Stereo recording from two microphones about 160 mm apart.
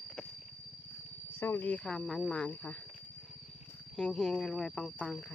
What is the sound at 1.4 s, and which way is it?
Speech, 15° left (ahead or behind).